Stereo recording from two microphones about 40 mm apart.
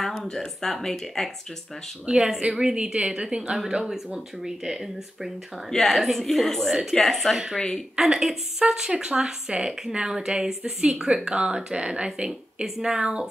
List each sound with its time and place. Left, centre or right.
0.6 s speech: centre
2.1 s a woman's voice: centre
5.7 s a woman's voice: centre
8.0 s a woman's voice: centre